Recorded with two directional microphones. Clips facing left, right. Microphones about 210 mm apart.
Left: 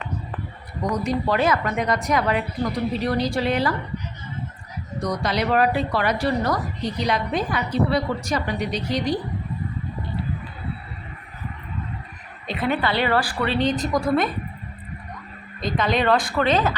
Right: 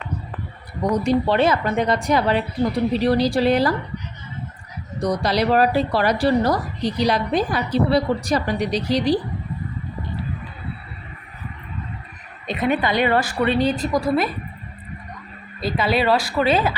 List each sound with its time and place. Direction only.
1.0 s a woman's voice: 30° right (ahead or behind)
5.0 s a woman's voice: 35° right (ahead or behind)
12.5 s a woman's voice: 20° right (ahead or behind)
13.6 s speech: 5° right (ahead or behind)
15.6 s speech: 5° right (ahead or behind)